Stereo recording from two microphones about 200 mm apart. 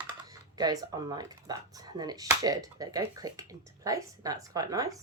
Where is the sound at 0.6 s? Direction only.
20° right (ahead or behind).